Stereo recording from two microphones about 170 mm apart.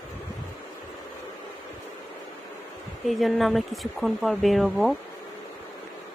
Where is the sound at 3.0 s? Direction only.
Centre (ahead or behind).